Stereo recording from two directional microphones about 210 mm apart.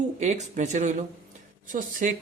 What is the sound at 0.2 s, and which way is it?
Speech, 35° right (ahead or behind).